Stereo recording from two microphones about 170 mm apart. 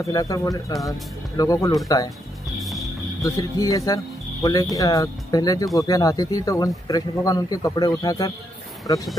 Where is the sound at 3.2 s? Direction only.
20° left (ahead or behind).